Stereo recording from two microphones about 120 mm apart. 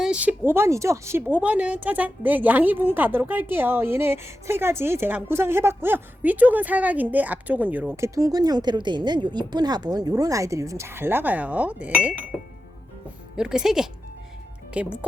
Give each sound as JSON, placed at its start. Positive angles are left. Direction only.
{"t": 0.0, "sound": "a woman's voice", "side_deg": -10}
{"t": 8.1, "sound": "speech", "side_deg": -30}
{"t": 13.3, "sound": "speech", "side_deg": -5}